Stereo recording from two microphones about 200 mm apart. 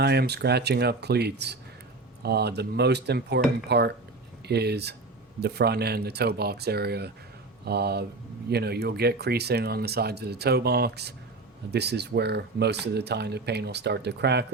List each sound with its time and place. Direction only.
0.0 s speech: 55° right (ahead or behind)